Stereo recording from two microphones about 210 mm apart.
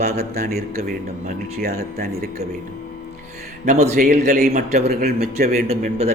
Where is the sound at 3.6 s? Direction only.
35° right (ahead or behind).